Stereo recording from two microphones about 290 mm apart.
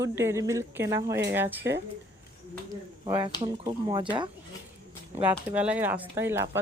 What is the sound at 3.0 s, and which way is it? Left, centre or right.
Speech, centre.